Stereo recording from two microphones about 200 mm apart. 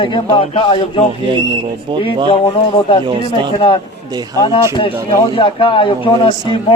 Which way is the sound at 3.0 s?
25° right (ahead or behind).